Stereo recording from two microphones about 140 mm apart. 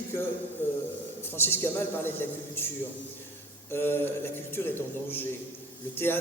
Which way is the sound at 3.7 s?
15° left (ahead or behind).